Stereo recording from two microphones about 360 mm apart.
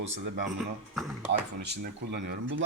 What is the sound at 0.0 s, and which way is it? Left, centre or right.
Speech, right.